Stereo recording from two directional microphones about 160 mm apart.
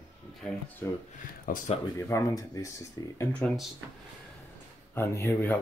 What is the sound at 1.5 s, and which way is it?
Speech, 60° left (ahead or behind).